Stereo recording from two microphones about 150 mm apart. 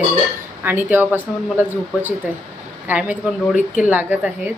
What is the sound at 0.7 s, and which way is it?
Speech, 15° right (ahead or behind).